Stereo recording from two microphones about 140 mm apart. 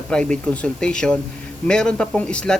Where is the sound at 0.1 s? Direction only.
5° left (ahead or behind).